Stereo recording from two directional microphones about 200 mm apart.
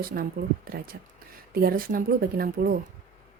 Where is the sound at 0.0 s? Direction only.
45° right (ahead or behind).